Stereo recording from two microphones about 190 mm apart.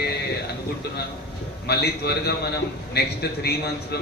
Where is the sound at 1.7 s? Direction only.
60° left (ahead or behind).